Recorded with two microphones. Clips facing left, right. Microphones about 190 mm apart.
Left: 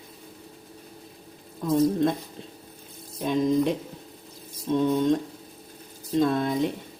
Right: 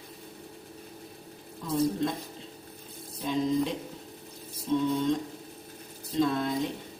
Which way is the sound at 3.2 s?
55° left (ahead or behind).